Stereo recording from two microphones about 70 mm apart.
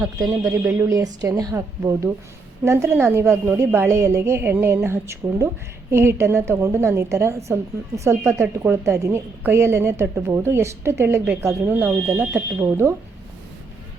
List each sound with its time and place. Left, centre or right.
0.0 s speech: right
1.0 s a woman's voice: right
2.6 s a woman's voice: right